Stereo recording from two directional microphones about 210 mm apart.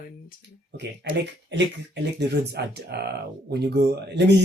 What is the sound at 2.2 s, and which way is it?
Speech, 50° right (ahead or behind).